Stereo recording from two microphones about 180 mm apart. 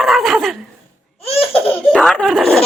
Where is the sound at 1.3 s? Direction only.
30° left (ahead or behind).